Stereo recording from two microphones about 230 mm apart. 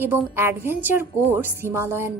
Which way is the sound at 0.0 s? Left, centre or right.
Centre.